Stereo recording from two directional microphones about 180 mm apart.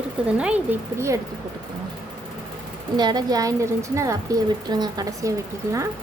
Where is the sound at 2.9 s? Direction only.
25° right (ahead or behind).